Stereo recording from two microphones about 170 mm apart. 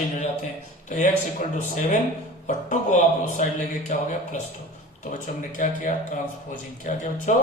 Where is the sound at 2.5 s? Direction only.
50° left (ahead or behind).